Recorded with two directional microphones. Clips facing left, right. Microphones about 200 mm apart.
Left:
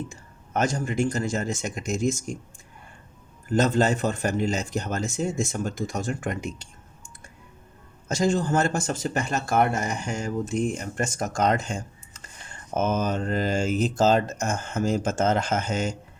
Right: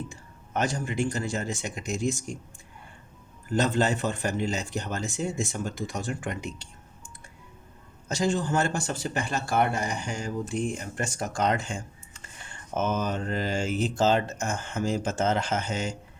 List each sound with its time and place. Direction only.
0.1 s speech: 45° left (ahead or behind)
3.5 s speech: 45° left (ahead or behind)
8.0 s speech: 45° left (ahead or behind)